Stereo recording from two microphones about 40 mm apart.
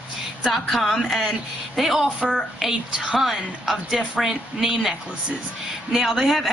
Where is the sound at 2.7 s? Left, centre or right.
Centre.